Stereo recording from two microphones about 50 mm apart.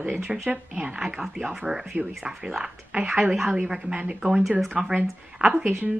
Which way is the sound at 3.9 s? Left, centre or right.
Right.